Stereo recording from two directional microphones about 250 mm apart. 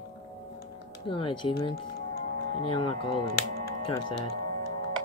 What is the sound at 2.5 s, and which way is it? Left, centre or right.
Speech, left.